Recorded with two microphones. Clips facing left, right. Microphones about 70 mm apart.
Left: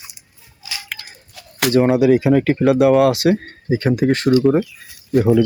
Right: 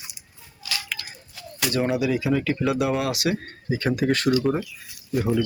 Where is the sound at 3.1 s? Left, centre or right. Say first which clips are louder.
Left 9 dB; left.